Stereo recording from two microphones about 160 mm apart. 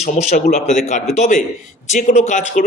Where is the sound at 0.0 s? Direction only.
50° left (ahead or behind).